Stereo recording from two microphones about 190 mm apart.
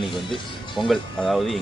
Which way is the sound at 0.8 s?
Centre (ahead or behind).